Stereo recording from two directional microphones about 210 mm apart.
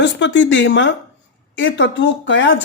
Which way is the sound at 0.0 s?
55° left (ahead or behind).